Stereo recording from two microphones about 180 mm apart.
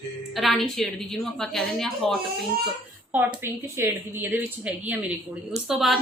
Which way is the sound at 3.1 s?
10° right (ahead or behind).